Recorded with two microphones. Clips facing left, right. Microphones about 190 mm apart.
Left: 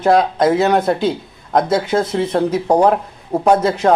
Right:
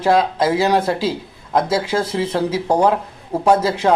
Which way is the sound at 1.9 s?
40° left (ahead or behind).